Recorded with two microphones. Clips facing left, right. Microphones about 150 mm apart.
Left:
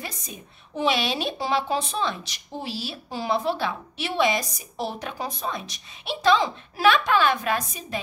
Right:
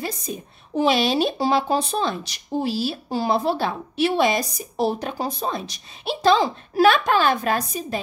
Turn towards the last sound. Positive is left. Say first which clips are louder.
# right 4 dB
turn(degrees=-40)  # may be behind; listen again after turning